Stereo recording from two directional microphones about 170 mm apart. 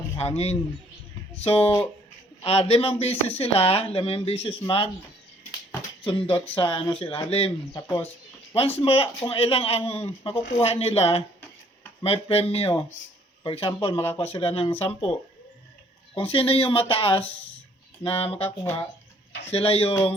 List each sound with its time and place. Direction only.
0.2 s speech: 40° left (ahead or behind)
6.1 s speech: 30° left (ahead or behind)
16.1 s speech: 35° left (ahead or behind)
18.4 s speech: 15° left (ahead or behind)
19.5 s speech: 35° left (ahead or behind)